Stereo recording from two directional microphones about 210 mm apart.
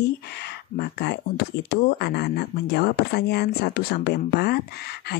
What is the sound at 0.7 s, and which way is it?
Speech, 55° left (ahead or behind).